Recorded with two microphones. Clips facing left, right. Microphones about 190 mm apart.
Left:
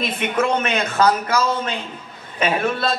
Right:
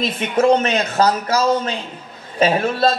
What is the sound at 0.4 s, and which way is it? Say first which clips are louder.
A woman's voice: right 6 dB; 30° right (ahead or behind).